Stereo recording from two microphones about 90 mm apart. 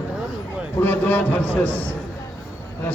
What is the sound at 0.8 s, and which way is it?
A man's voice, 20° left (ahead or behind).